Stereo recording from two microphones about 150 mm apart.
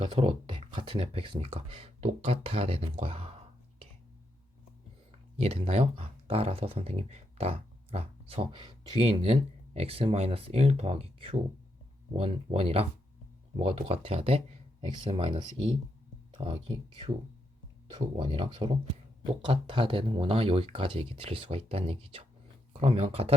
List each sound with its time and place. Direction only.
0.0 s speech: 40° right (ahead or behind)
5.1 s speech: 40° right (ahead or behind)